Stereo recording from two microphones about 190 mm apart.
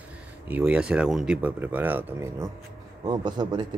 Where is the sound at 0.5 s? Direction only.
5° right (ahead or behind).